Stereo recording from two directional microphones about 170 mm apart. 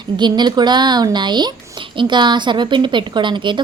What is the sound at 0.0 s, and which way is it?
Speech, 25° right (ahead or behind).